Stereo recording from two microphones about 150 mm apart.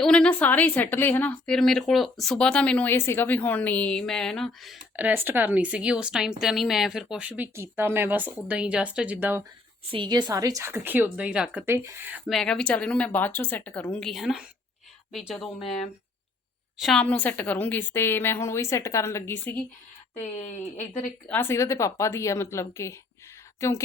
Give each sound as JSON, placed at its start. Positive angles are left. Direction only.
{"t": 0.0, "sound": "a woman's voice", "side_deg": 5}
{"t": 4.9, "sound": "speech", "side_deg": -10}
{"t": 9.9, "sound": "speech", "side_deg": -30}
{"t": 12.3, "sound": "a woman's voice", "side_deg": 5}
{"t": 20.5, "sound": "speech", "side_deg": 50}
{"t": 20.8, "sound": "speech", "side_deg": 15}